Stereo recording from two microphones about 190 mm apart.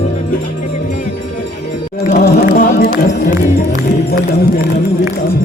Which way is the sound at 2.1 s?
50° left (ahead or behind).